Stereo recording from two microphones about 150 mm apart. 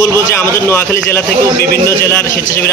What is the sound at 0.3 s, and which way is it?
A man's voice, 15° left (ahead or behind).